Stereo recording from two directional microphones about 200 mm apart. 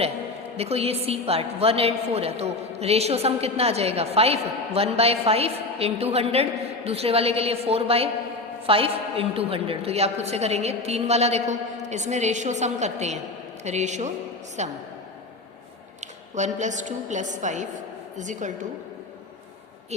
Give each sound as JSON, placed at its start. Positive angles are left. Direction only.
{"t": 0.5, "sound": "a woman's voice", "side_deg": -30}
{"t": 16.0, "sound": "a sound", "side_deg": -35}
{"t": 16.6, "sound": "a woman's voice", "side_deg": -35}